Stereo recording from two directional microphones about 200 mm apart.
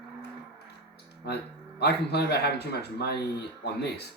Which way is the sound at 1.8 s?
55° left (ahead or behind).